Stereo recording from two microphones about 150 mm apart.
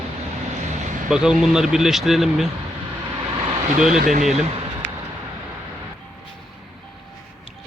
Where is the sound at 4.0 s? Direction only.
60° right (ahead or behind).